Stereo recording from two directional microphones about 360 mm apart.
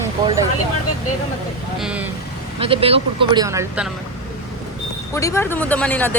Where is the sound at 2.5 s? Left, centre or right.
Centre.